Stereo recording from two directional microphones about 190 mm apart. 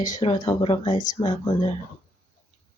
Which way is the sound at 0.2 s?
25° left (ahead or behind).